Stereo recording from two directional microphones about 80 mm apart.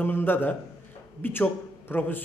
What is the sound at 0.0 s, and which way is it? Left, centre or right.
A man's voice, left.